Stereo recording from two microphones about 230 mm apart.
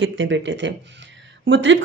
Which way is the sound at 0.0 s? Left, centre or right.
Right.